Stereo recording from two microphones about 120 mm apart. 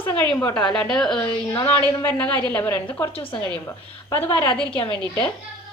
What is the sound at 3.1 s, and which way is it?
Speech, 50° left (ahead or behind).